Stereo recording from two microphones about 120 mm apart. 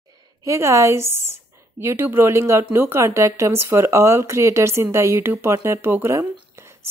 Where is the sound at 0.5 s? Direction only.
25° right (ahead or behind).